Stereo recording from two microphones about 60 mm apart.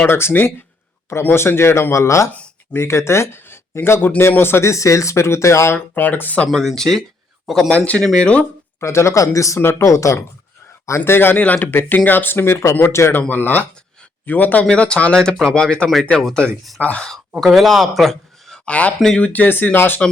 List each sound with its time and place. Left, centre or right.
0.1 s speech: left
5.9 s speech: left
6.5 s speech: centre
8.0 s speech: centre
8.8 s speech: left
9.6 s speech: left
9.8 s speech: left
10.8 s speech: left
13.1 s speech: left
14.6 s speech: centre
17.4 s a man's voice: centre
18.6 s speech: left